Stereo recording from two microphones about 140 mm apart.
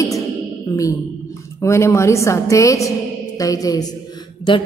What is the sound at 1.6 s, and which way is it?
A woman's voice, 20° left (ahead or behind).